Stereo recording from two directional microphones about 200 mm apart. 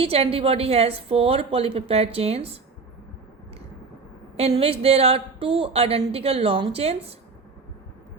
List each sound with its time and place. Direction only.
0.0 s a woman's voice: 30° right (ahead or behind)
4.4 s a woman's voice: 30° right (ahead or behind)